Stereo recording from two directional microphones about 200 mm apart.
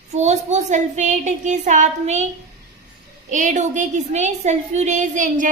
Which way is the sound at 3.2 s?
40° right (ahead or behind).